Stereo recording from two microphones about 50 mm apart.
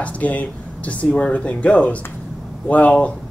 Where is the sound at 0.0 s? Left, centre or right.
Left.